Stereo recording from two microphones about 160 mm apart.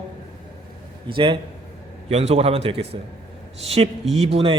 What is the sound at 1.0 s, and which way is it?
A man's voice, 30° right (ahead or behind).